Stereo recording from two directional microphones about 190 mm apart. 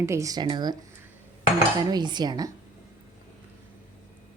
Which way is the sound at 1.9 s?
20° right (ahead or behind).